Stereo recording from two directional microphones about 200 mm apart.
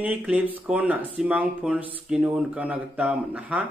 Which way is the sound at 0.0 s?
10° right (ahead or behind).